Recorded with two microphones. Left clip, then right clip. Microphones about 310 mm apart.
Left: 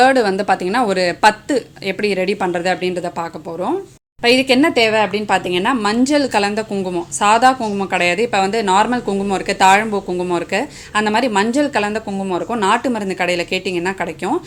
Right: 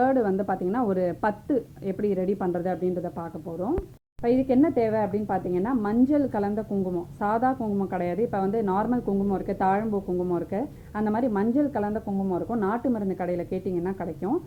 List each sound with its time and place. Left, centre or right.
0.0 s a woman's voice: left